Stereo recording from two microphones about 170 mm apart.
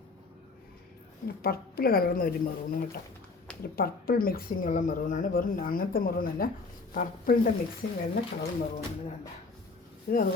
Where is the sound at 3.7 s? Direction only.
60° left (ahead or behind).